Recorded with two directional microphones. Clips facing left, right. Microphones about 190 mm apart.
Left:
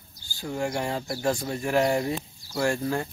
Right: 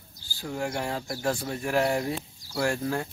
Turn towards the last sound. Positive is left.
turn(degrees=0)  # may be behind; listen again after turning